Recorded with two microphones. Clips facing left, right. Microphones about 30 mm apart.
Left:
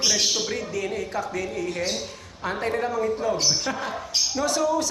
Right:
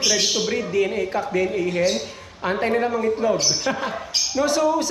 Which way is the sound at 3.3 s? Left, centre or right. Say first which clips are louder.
Right 2 dB; right.